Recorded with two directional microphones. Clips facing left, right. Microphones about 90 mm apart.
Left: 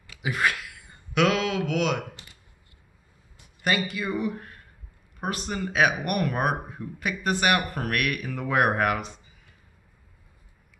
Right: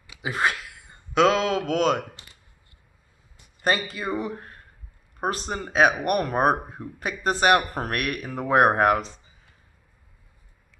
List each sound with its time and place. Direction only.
0.2 s a sound: 30° right (ahead or behind)
1.1 s speech: 30° right (ahead or behind)
3.6 s speech: 35° right (ahead or behind)